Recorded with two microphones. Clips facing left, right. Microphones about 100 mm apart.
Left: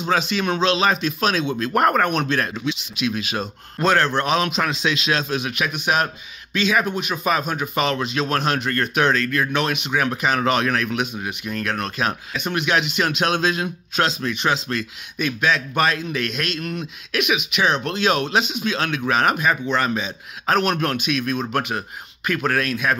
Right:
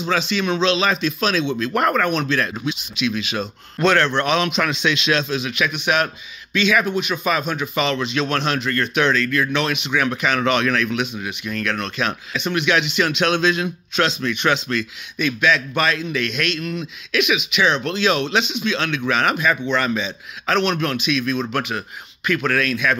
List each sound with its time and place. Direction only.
0.0 s speech: 50° left (ahead or behind)
16.6 s speech: 50° left (ahead or behind)